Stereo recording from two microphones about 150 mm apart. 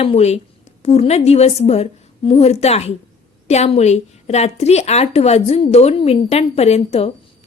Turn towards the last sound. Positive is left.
turn(degrees=45)  # may be behind; listen again after turning